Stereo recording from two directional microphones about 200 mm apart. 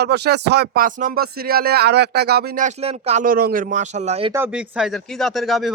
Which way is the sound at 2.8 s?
30° right (ahead or behind).